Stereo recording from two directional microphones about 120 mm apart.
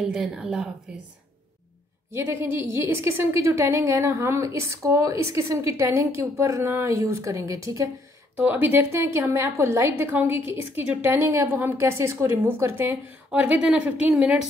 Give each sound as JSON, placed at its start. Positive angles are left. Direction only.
{"t": 0.0, "sound": "speech", "side_deg": -5}
{"t": 2.1, "sound": "a woman's voice", "side_deg": -20}
{"t": 8.4, "sound": "a woman's voice", "side_deg": -15}
{"t": 13.3, "sound": "speech", "side_deg": -10}